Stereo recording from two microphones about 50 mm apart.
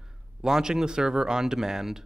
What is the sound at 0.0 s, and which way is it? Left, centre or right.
Speech, centre.